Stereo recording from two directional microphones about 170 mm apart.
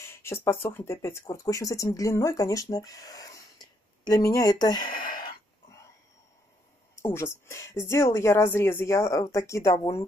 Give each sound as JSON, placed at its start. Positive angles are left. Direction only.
{"t": 0.0, "sound": "speech", "side_deg": 15}
{"t": 7.0, "sound": "speech", "side_deg": 15}